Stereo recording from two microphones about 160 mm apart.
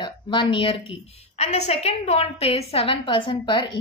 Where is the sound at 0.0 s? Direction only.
30° left (ahead or behind).